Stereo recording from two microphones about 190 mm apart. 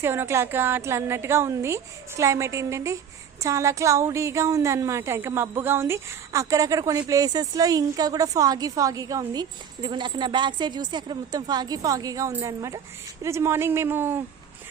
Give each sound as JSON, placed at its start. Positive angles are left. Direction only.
{"t": 0.0, "sound": "a woman's voice", "side_deg": -15}